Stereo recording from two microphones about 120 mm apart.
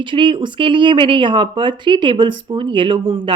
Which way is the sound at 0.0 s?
45° right (ahead or behind).